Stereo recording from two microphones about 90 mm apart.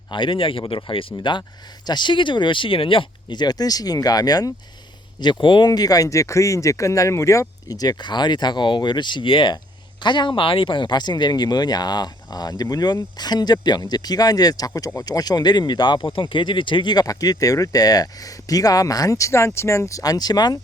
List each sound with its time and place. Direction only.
0.1 s speech: 70° left (ahead or behind); by 4.5 s 45° left (ahead or behind)
5.2 s speech: 60° left (ahead or behind)